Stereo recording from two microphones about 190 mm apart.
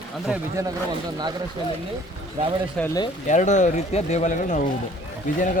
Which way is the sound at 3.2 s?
40° left (ahead or behind).